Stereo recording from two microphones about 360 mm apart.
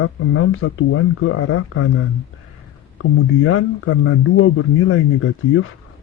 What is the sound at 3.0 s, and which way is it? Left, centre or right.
Speech, left.